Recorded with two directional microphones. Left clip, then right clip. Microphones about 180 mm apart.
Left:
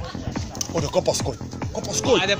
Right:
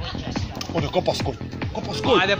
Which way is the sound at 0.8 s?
50° left (ahead or behind).